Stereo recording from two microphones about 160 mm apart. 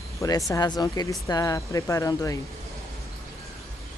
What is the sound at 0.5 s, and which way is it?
Speech, 25° left (ahead or behind).